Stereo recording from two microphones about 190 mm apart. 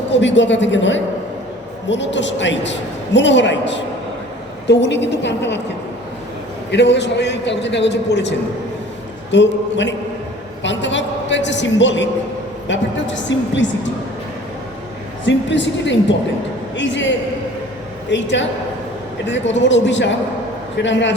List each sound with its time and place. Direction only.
0.1 s a man's voice: 70° left (ahead or behind)
6.7 s a man's voice: 65° left (ahead or behind)
15.3 s a man's voice: 70° left (ahead or behind)